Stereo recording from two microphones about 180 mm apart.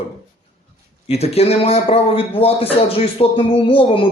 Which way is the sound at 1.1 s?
35° left (ahead or behind).